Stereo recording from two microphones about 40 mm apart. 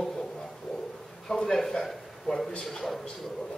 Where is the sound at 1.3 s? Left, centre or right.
Centre.